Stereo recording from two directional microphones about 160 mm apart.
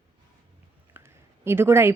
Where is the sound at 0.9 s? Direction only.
15° right (ahead or behind).